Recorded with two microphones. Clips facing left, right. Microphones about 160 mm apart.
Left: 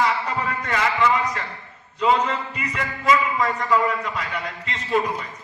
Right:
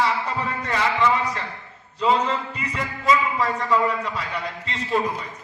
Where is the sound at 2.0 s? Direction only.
30° right (ahead or behind).